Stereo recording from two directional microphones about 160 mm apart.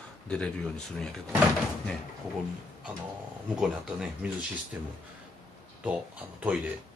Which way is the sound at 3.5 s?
5° right (ahead or behind).